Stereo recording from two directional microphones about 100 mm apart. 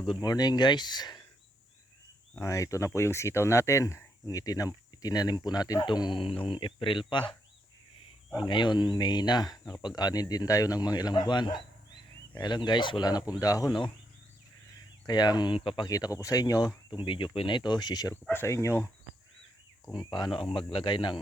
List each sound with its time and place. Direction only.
0.0 s speech: 45° left (ahead or behind)
2.4 s speech: 30° left (ahead or behind)
5.8 s speech: 50° left (ahead or behind)
8.4 s speech: 50° left (ahead or behind)
15.0 s speech: 45° left (ahead or behind)
15.9 s speech: 35° left (ahead or behind)
17.0 s speech: 55° left (ahead or behind)
18.1 s speech: 25° left (ahead or behind)
19.9 s speech: 50° left (ahead or behind)
20.5 s speech: 65° left (ahead or behind)